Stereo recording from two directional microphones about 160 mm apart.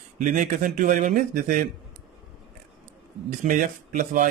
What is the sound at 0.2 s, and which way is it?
A man's voice, 50° right (ahead or behind).